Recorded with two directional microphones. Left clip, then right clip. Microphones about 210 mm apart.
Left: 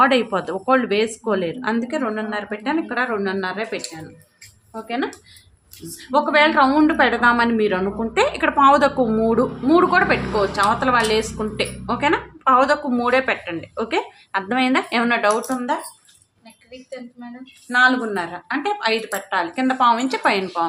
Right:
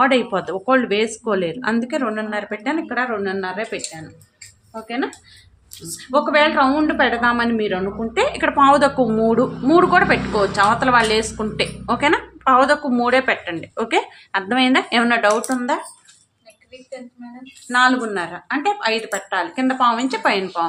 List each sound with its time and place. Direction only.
0.0 s a woman's voice: centre (ahead or behind)
15.5 s speech: 20° right (ahead or behind)
17.2 s speech: 30° left (ahead or behind)
17.7 s a woman's voice: 10° right (ahead or behind)